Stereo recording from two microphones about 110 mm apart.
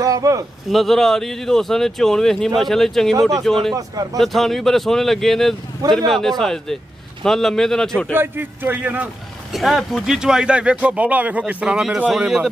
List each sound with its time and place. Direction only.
0.0 s speech: 30° right (ahead or behind)
0.7 s speech: centre (ahead or behind)
3.7 s a man's voice: 35° right (ahead or behind)
4.2 s speech: centre (ahead or behind)
8.1 s speech: 20° right (ahead or behind)
9.5 s speech: centre (ahead or behind)